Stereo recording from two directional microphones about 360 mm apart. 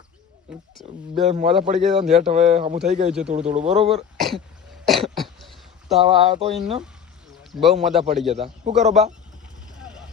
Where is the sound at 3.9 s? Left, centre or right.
Centre.